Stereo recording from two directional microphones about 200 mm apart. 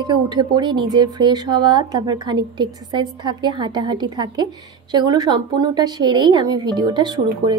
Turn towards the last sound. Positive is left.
turn(degrees=-20)  # may be behind; listen again after turning